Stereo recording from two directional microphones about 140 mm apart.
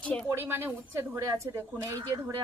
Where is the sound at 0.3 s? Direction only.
15° right (ahead or behind).